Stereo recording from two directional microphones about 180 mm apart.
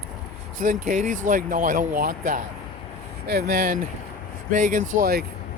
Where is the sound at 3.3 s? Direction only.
60° right (ahead or behind).